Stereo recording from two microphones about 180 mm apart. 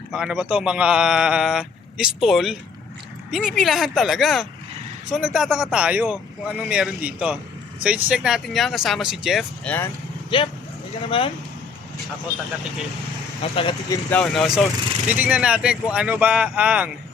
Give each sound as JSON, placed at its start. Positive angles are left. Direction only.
{"t": 0.1, "sound": "speech", "side_deg": -5}
{"t": 10.2, "sound": "speech", "side_deg": 30}
{"t": 13.6, "sound": "speech", "side_deg": 30}
{"t": 14.1, "sound": "speech", "side_deg": 5}